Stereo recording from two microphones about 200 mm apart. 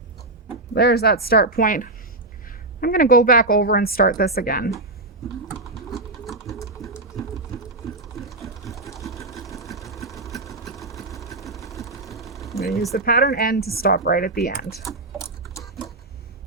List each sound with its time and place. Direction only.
0.7 s a woman's voice: 55° left (ahead or behind)
6.2 s sewing machine: centre (ahead or behind)
8.2 s sewing machine: centre (ahead or behind)
8.8 s sewing machine: 15° left (ahead or behind)
9.6 s sewing machine: centre (ahead or behind)
10.1 s engine: centre (ahead or behind)
10.8 s vehicle: centre (ahead or behind)
11.9 s sewing machine: centre (ahead or behind)
12.9 s a woman's voice: 50° left (ahead or behind)